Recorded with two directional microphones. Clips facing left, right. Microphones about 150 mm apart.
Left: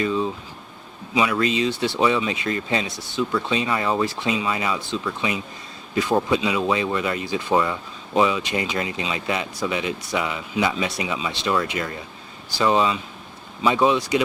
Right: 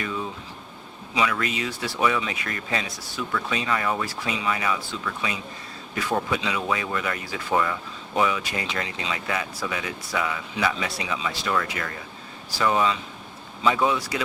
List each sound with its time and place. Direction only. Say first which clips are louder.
1.1 s speech: left 5 dB; 25° left (ahead or behind)